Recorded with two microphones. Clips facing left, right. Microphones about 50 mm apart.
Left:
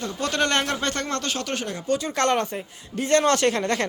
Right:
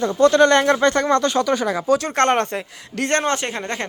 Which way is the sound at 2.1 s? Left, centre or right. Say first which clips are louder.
Right 5 dB; right.